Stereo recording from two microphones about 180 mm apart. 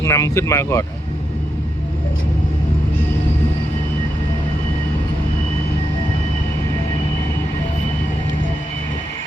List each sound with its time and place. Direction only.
0.0 s speech: 15° left (ahead or behind)